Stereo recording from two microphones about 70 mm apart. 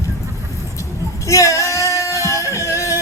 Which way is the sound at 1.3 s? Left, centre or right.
Left.